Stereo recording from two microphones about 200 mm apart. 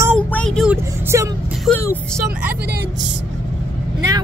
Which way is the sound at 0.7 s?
15° right (ahead or behind).